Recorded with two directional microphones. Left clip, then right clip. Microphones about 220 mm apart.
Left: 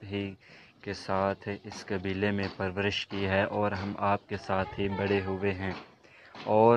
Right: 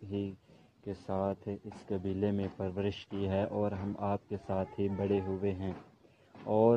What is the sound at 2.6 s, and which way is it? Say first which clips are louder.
A man's voice: left 6 dB; centre (ahead or behind).